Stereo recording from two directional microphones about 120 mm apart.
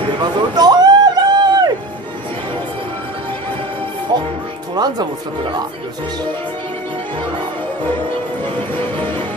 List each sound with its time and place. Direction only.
0.2 s a sound: 35° right (ahead or behind)
4.1 s music: 40° right (ahead or behind)
4.7 s speech: 35° right (ahead or behind)